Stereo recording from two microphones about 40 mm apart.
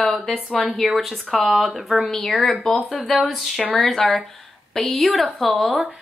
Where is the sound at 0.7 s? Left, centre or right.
Centre.